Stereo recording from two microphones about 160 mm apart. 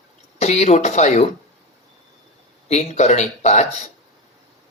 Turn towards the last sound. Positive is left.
turn(degrees=45)  # may be behind; listen again after turning